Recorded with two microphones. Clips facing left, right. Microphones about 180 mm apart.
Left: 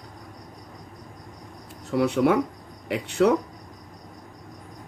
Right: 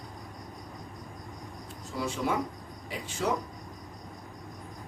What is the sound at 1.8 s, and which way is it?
Speech, 65° left (ahead or behind).